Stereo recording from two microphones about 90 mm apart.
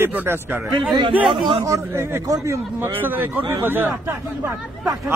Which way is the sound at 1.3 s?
65° right (ahead or behind).